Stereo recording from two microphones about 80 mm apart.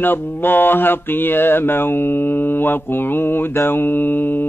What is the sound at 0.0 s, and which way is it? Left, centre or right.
Mantra, left.